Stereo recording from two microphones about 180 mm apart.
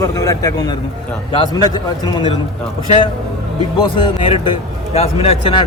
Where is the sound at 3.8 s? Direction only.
30° left (ahead or behind).